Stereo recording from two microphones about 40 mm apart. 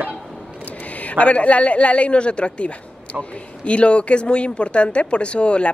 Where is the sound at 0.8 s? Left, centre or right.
Left.